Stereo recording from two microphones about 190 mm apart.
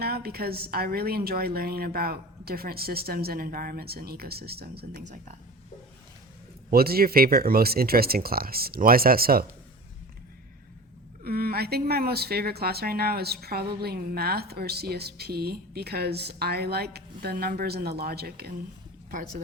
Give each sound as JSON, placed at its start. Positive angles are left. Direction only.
{"t": 0.0, "sound": "a woman's voice", "side_deg": -55}
{"t": 6.7, "sound": "a woman's voice", "side_deg": -55}
{"t": 11.2, "sound": "a woman's voice", "side_deg": -55}